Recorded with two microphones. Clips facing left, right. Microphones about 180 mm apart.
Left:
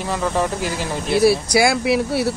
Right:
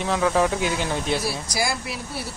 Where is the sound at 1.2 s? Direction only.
70° left (ahead or behind).